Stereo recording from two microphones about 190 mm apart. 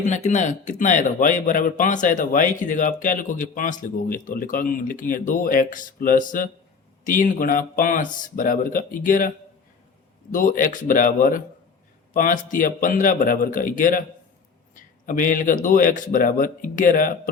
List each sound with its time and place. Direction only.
0.0 s speech: 40° left (ahead or behind)
10.3 s speech: 45° left (ahead or behind)